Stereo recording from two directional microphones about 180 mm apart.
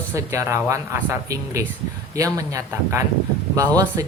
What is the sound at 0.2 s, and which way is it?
Speech, 15° right (ahead or behind).